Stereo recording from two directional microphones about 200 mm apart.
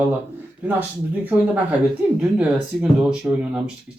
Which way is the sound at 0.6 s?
10° right (ahead or behind).